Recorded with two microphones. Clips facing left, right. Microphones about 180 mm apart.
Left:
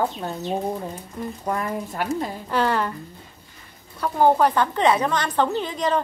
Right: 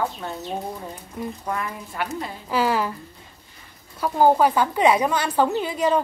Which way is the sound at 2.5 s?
5° right (ahead or behind).